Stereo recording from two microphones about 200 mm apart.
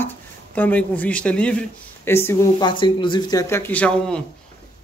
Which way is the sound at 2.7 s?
25° left (ahead or behind).